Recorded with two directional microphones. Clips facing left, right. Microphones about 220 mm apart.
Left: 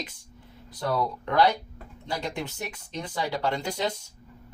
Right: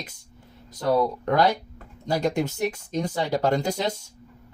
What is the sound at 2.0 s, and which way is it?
Speech, 45° right (ahead or behind).